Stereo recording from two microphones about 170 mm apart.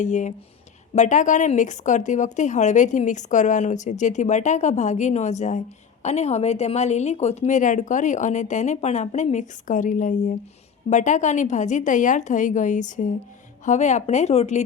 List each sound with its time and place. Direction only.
0.0 s a woman's voice: 45° left (ahead or behind)